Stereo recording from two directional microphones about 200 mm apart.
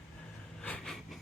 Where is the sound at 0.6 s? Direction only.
5° left (ahead or behind).